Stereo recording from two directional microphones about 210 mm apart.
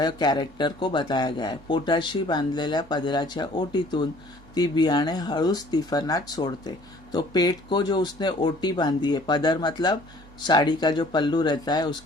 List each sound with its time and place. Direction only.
0.0 s speech: 20° left (ahead or behind)